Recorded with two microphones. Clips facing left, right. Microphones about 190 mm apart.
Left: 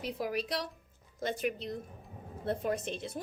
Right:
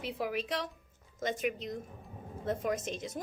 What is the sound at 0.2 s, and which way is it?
A woman's voice, 40° left (ahead or behind).